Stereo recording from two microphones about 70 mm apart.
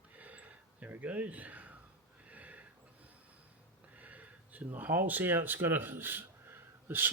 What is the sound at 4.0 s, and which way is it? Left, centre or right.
Speech, right.